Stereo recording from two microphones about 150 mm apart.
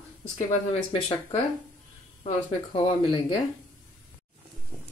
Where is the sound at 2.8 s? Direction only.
30° left (ahead or behind).